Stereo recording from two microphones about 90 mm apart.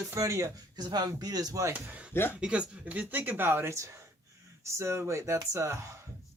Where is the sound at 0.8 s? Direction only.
50° right (ahead or behind).